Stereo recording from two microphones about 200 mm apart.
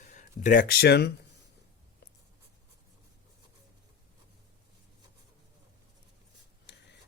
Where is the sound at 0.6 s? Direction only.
55° left (ahead or behind).